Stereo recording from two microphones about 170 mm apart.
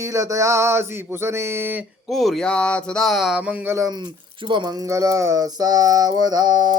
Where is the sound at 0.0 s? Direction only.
20° right (ahead or behind).